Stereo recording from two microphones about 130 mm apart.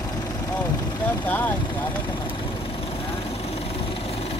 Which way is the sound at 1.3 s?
15° left (ahead or behind).